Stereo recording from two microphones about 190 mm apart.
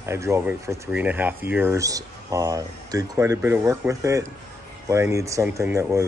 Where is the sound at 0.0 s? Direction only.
15° right (ahead or behind).